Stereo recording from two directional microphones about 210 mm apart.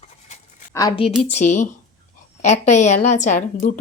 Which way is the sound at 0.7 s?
20° left (ahead or behind).